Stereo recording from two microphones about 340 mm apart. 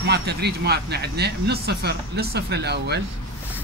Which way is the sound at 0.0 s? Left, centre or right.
Right.